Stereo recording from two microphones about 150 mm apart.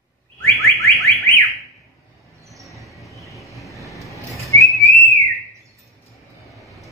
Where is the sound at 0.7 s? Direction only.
20° left (ahead or behind).